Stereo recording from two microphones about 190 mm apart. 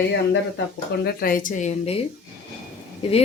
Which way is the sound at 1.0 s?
50° left (ahead or behind).